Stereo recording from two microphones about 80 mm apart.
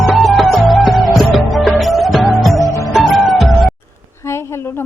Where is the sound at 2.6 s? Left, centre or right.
Left.